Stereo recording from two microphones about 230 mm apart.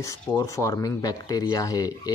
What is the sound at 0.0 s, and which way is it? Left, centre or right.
Speech, centre.